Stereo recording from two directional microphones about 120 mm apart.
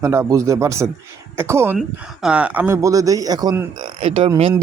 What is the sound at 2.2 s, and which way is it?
Speech, 10° right (ahead or behind).